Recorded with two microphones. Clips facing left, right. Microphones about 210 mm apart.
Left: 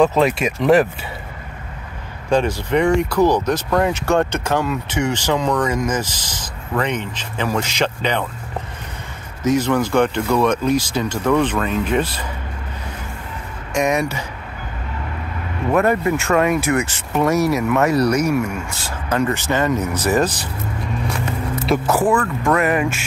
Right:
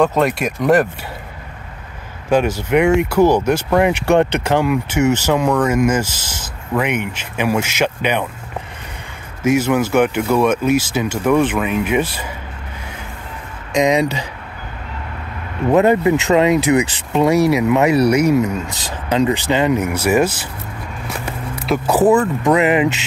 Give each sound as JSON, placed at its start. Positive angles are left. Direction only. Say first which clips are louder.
{"t": 0.0, "sound": "speech", "louder": "even", "side_deg": 0}
{"t": 2.2, "sound": "speech", "louder": "right 2 dB", "side_deg": -5}
{"t": 9.4, "sound": "speech", "louder": "right 2 dB", "side_deg": -10}
{"t": 13.7, "sound": "speech", "louder": "right 4 dB", "side_deg": -15}
{"t": 15.7, "sound": "speech", "louder": "right 4 dB", "side_deg": -20}
{"t": 21.8, "sound": "speech", "louder": "right 8 dB", "side_deg": -20}